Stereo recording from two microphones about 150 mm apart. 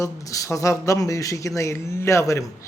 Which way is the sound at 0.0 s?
20° left (ahead or behind).